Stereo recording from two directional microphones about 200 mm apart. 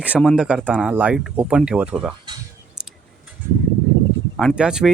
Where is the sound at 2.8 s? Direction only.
5° right (ahead or behind).